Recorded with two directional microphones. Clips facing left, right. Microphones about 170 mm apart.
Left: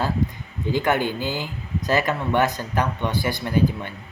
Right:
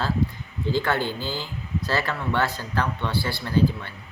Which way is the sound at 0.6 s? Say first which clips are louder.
Left 3 dB; 15° left (ahead or behind).